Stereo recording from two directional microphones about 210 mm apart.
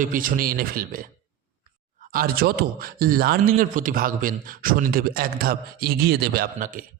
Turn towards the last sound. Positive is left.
turn(degrees=-40)  # may be behind; listen again after turning